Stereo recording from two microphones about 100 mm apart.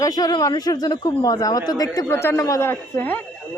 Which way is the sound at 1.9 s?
25° left (ahead or behind).